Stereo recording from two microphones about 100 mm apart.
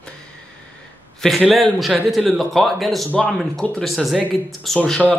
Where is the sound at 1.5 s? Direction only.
Centre (ahead or behind).